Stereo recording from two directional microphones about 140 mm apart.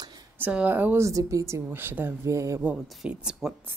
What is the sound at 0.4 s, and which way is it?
A woman's voice, 10° right (ahead or behind).